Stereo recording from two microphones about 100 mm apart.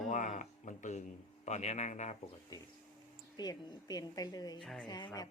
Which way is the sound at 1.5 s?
90° left.